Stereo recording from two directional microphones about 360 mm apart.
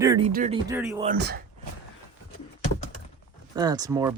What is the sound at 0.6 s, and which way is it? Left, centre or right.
Speech, centre.